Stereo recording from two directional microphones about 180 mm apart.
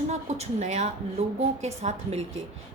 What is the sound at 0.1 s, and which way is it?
A woman's voice, 40° right (ahead or behind).